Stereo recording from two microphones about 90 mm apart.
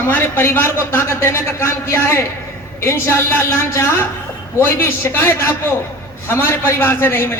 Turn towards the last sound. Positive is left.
turn(degrees=25)  # may be behind; listen again after turning